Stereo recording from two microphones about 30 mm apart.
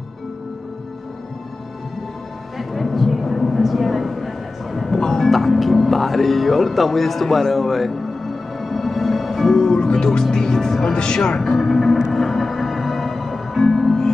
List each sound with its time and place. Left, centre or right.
2.5 s a sound: centre
5.0 s music: centre
9.8 s music: left
10.3 s speech: centre
11.5 s speech: centre
12.1 s music: centre